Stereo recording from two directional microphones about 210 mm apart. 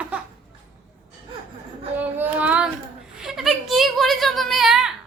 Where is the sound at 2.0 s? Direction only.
10° right (ahead or behind).